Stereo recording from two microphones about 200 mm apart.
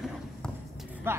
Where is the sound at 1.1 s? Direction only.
10° right (ahead or behind).